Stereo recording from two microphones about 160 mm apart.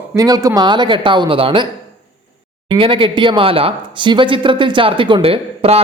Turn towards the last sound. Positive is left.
turn(degrees=-40)  # may be behind; listen again after turning